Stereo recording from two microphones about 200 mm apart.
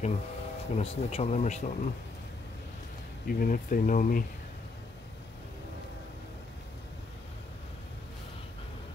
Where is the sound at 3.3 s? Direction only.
45° left (ahead or behind).